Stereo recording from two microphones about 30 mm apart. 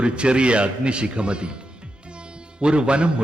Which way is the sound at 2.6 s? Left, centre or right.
Right.